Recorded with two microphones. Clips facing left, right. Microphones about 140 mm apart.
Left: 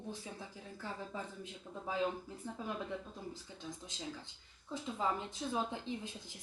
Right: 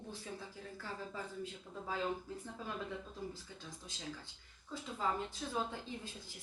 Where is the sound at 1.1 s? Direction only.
20° left (ahead or behind).